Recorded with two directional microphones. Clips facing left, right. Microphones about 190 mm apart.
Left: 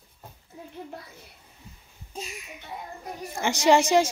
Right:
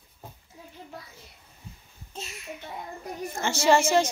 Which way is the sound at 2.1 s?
15° left (ahead or behind).